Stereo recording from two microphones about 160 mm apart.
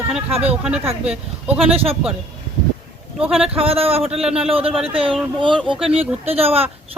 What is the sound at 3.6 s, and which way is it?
Speech, 35° right (ahead or behind).